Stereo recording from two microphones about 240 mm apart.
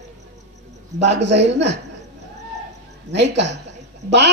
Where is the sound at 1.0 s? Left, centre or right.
Right.